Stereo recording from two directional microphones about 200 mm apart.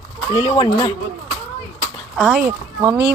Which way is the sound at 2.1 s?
Centre (ahead or behind).